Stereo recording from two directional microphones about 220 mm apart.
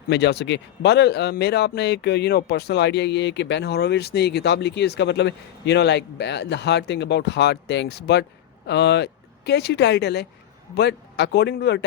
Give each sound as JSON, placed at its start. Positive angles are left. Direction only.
{"t": 0.1, "sound": "a man's voice", "side_deg": 50}